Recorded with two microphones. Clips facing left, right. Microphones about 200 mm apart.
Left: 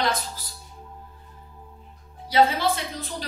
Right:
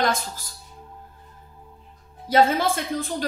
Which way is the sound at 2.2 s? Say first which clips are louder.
Right 2 dB; 50° right (ahead or behind).